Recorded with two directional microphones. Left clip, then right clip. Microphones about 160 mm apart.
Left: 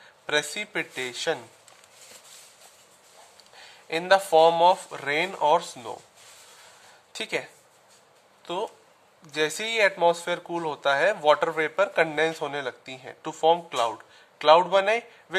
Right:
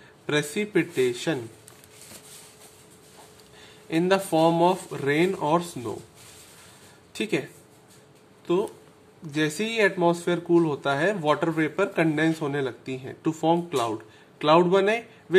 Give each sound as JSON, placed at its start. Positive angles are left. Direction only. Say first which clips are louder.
{"t": 0.3, "sound": "speech", "louder": "right 1 dB", "side_deg": 25}
{"t": 3.5, "sound": "speech", "louder": "right 3 dB", "side_deg": 25}
{"t": 7.1, "sound": "speech", "louder": "right 2 dB", "side_deg": 25}
{"t": 8.5, "sound": "speech", "louder": "right 5 dB", "side_deg": 30}